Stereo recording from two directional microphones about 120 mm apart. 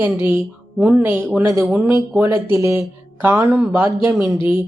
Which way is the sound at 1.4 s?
25° right (ahead or behind).